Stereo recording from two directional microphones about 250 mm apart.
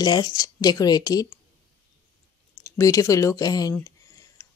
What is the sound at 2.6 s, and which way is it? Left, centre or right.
Speech, centre.